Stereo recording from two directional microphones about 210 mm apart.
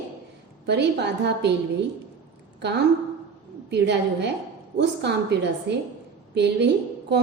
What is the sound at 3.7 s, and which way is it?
A woman's voice, 55° right (ahead or behind).